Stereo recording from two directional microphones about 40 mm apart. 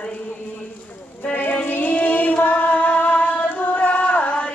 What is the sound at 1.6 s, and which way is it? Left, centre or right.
Music, left.